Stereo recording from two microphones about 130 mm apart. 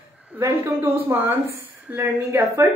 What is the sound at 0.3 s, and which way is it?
A woman's voice, 15° right (ahead or behind).